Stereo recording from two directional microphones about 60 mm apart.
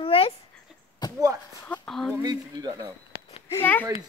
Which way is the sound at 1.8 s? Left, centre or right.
Centre.